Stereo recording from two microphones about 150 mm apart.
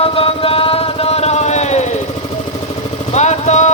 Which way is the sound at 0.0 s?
40° left (ahead or behind).